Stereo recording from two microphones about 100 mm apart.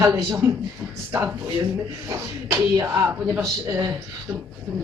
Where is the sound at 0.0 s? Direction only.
35° right (ahead or behind).